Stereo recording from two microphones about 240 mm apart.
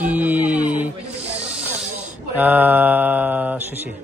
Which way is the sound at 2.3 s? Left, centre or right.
Centre.